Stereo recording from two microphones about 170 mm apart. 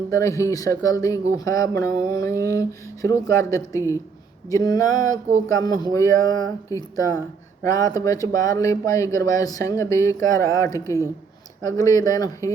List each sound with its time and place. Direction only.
0.1 s speech: 20° left (ahead or behind)